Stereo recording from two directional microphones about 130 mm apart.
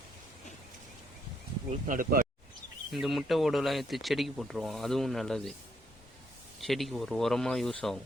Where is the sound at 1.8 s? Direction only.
90° right.